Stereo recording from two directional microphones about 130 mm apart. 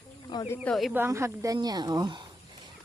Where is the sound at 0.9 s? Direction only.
20° right (ahead or behind); by 2.2 s 35° right (ahead or behind).